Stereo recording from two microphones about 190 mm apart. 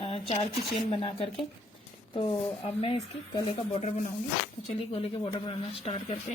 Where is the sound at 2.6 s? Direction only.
30° left (ahead or behind).